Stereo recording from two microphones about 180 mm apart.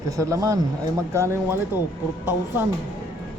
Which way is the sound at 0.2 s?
20° right (ahead or behind).